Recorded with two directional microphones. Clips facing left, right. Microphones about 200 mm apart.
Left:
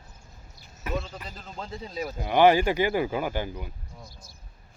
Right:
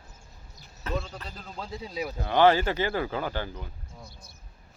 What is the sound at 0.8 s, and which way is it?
A man's voice, 5° left (ahead or behind).